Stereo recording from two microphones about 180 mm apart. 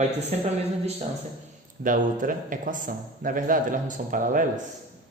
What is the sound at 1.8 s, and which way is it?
A man's voice, 50° right (ahead or behind).